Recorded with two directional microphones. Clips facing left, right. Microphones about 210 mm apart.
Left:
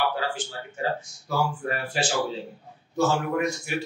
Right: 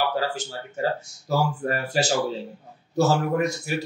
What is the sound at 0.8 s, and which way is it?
Speech, 40° right (ahead or behind).